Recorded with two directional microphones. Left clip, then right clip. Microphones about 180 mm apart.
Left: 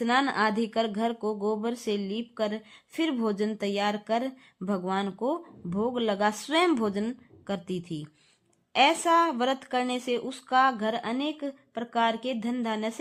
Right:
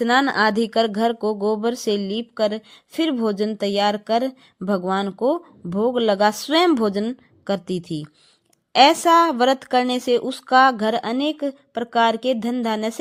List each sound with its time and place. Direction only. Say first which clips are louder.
0.0 s speech: right 7 dB; 35° right (ahead or behind)